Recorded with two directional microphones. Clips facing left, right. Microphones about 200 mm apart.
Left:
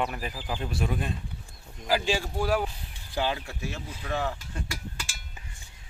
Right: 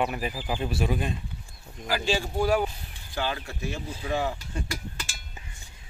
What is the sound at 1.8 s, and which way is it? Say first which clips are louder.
Speech: left 3 dB; 25° left (ahead or behind).